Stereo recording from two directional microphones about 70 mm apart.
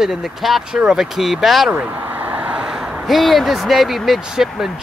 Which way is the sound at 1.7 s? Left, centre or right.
Centre.